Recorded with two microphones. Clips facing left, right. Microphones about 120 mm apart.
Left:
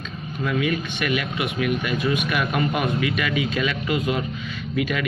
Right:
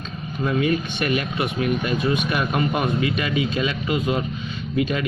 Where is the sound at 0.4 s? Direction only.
35° right (ahead or behind).